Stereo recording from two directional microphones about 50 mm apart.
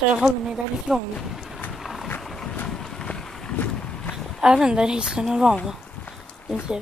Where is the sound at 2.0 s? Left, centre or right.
Left.